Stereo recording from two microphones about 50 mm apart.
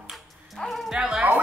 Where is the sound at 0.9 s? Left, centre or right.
Centre.